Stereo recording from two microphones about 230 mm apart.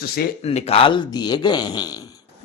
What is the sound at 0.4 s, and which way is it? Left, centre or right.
A man's voice, left.